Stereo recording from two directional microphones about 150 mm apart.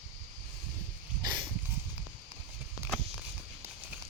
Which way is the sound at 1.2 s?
25° right (ahead or behind).